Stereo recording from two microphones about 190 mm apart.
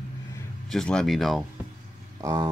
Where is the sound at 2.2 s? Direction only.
15° right (ahead or behind).